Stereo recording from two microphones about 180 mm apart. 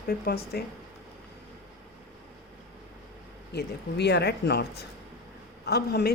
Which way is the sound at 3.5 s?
65° left (ahead or behind).